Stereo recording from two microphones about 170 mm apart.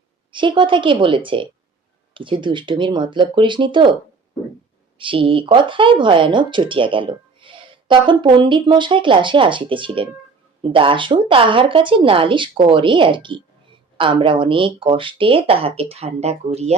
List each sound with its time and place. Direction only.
0.3 s speech: 30° right (ahead or behind)
4.9 s speech: 30° right (ahead or behind)